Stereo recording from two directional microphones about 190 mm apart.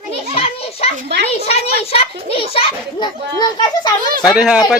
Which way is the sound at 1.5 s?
30° left (ahead or behind).